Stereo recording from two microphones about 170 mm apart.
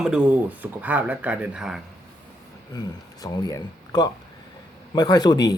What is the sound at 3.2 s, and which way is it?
Speech, 20° left (ahead or behind).